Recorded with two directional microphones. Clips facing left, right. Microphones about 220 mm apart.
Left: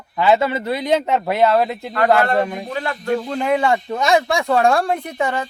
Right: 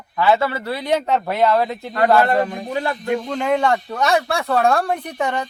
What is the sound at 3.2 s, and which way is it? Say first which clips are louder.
Speech: even; 5° left (ahead or behind).